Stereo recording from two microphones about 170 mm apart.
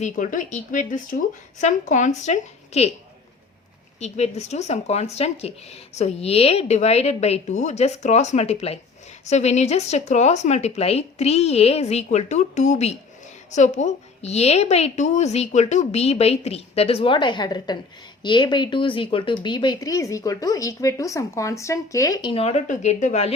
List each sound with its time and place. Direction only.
0.0 s a woman's voice: 50° left (ahead or behind)
4.0 s a woman's voice: 40° left (ahead or behind)